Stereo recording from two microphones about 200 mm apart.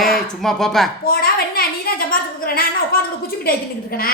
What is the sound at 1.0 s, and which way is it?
A woman's voice, 50° left (ahead or behind).